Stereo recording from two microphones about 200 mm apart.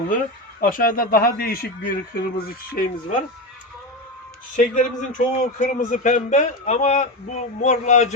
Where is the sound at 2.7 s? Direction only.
45° left (ahead or behind).